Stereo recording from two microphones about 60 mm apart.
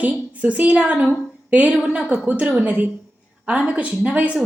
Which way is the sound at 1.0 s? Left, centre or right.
Right.